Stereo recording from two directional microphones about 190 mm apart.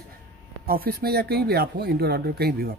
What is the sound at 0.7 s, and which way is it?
Speech, 55° right (ahead or behind).